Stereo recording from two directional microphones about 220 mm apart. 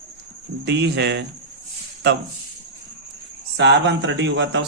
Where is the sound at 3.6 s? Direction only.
50° right (ahead or behind).